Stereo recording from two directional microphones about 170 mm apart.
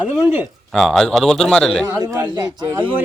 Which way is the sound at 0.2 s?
10° right (ahead or behind).